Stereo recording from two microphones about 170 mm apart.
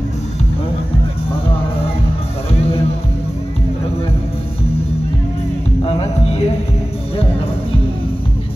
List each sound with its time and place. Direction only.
5.9 s music: 35° left (ahead or behind)